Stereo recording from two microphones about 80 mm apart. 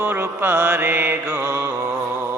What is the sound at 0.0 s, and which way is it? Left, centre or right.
Mantra, right.